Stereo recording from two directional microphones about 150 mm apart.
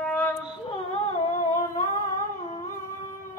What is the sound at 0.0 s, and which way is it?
Female singing, 10° left (ahead or behind).